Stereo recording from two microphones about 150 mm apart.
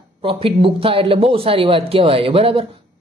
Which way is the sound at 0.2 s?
35° right (ahead or behind).